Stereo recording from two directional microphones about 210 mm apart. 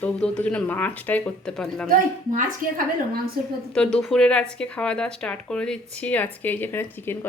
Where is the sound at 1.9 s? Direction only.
40° right (ahead or behind).